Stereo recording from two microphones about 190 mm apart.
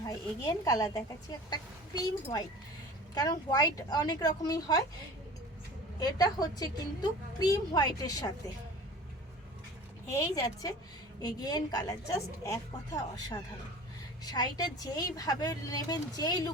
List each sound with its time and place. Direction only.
0.0 s a woman's voice: 20° left (ahead or behind)
6.0 s a woman's voice: 20° left (ahead or behind)
10.1 s a woman's voice: 15° left (ahead or behind)